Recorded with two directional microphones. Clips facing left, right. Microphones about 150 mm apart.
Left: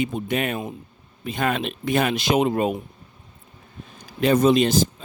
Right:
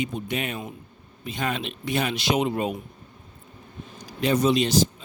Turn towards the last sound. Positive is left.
turn(degrees=50)  # may be behind; listen again after turning